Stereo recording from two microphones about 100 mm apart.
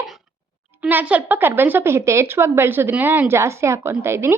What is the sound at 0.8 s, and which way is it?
A woman's voice, 15° right (ahead or behind).